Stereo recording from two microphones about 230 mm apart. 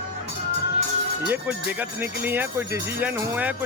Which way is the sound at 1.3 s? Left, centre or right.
Centre.